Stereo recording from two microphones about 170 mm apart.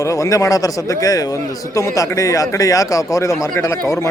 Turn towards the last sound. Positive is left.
turn(degrees=15)  # may be behind; listen again after turning